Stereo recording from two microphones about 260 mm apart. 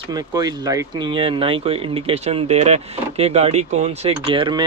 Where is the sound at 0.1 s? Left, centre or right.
Centre.